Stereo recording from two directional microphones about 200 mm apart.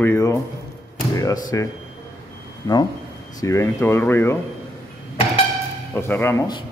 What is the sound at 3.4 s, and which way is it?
Speech, 15° left (ahead or behind).